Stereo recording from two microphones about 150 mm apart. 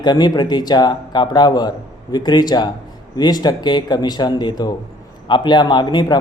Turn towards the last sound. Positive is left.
turn(degrees=30)  # may be behind; listen again after turning